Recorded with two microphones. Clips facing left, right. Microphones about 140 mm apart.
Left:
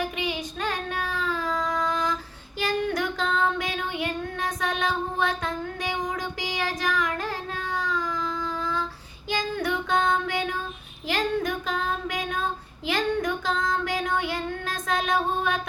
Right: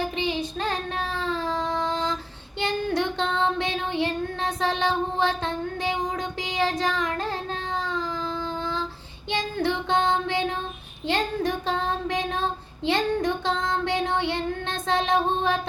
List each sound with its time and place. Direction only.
0.0 s child singing: 30° right (ahead or behind)
7.8 s baby cry: 30° right (ahead or behind)
9.3 s child singing: 25° right (ahead or behind)